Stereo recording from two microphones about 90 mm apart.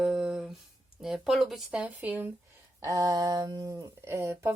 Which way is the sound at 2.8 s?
40° right (ahead or behind).